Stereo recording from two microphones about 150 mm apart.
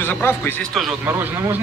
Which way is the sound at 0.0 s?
15° left (ahead or behind).